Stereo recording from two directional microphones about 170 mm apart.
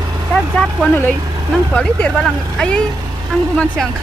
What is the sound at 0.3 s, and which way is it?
Vehicle, centre (ahead or behind).